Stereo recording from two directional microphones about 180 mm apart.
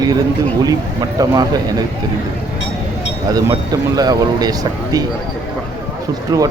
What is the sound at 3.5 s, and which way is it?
Speech, 20° right (ahead or behind).